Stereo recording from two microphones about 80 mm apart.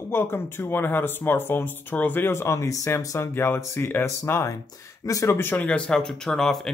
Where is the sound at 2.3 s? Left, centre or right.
Left.